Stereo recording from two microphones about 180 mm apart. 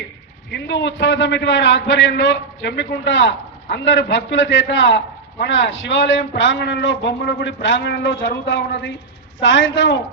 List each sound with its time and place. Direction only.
0.5 s a man's voice: 75° left (ahead or behind)
9.4 s a woman's voice: 90° left